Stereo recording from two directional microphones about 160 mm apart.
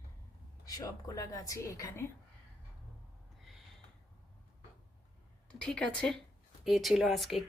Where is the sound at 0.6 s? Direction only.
25° left (ahead or behind).